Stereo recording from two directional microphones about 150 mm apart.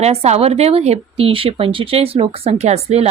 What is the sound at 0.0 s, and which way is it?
Speech, 45° right (ahead or behind).